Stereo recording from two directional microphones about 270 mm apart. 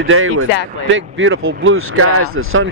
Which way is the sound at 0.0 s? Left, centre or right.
Right.